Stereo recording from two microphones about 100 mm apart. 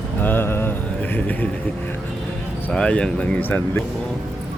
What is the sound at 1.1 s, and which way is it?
Speech, 15° left (ahead or behind).